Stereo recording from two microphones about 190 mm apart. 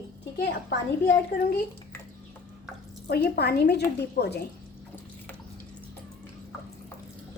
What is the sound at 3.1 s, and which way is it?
Speech, 55° left (ahead or behind).